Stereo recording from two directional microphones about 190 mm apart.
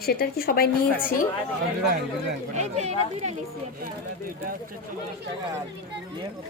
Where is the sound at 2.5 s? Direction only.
35° right (ahead or behind).